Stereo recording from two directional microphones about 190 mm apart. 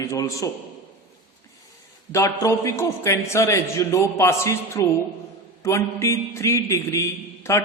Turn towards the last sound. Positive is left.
turn(degrees=15)  # may be behind; listen again after turning